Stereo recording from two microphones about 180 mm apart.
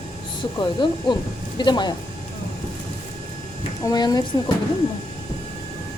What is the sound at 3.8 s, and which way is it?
Speech, 20° left (ahead or behind).